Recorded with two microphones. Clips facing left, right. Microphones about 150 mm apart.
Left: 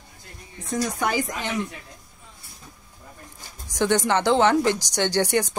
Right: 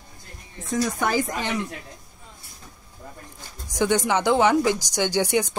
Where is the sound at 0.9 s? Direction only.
Centre (ahead or behind).